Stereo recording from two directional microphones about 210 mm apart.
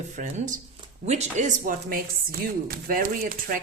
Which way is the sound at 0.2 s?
35° right (ahead or behind).